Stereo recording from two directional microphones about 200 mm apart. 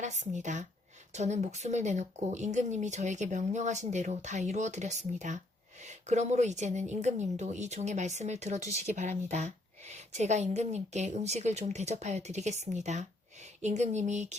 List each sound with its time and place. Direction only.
0.0 s a woman's voice: 35° right (ahead or behind)